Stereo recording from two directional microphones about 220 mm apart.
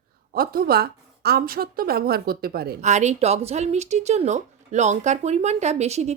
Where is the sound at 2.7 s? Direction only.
30° right (ahead or behind).